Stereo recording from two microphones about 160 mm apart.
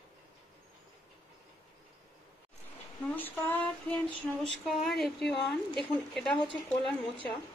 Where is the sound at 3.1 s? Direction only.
10° left (ahead or behind).